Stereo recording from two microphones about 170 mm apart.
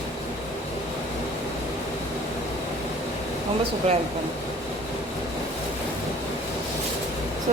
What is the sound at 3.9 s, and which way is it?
Speech, 35° right (ahead or behind).